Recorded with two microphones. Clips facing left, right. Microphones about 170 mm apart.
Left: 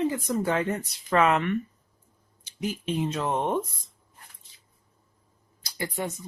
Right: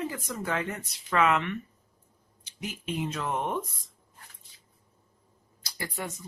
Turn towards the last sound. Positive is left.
turn(degrees=20)  # may be behind; listen again after turning